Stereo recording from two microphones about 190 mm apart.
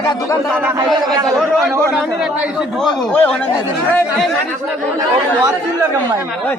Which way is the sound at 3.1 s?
5° left (ahead or behind).